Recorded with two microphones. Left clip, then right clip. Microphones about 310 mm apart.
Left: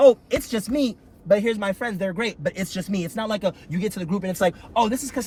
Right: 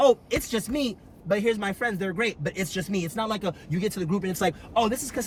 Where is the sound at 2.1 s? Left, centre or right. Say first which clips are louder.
Left 2 dB; centre.